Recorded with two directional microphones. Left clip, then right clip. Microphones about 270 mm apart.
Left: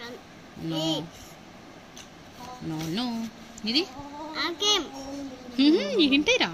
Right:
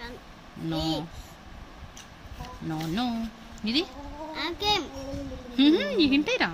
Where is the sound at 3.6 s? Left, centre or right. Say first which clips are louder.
Left 1 dB; right.